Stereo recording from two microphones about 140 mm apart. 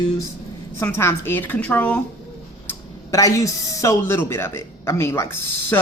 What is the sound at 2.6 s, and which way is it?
Speech, 20° left (ahead or behind).